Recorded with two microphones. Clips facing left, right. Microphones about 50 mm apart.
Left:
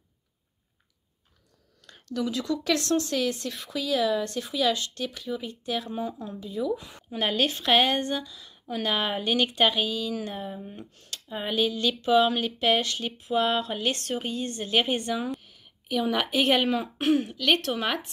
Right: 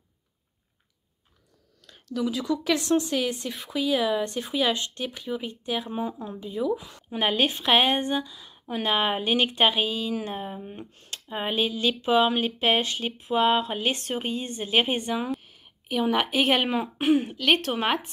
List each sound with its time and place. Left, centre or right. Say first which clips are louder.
1.9 s speech: right 2 dB; centre
15.2 s a sound: right 2 dB; centre
15.5 s a woman's voice: even; centre